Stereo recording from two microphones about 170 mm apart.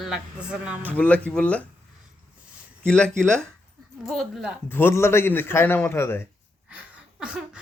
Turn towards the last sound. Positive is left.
turn(degrees=-5)  # may be behind; listen again after turning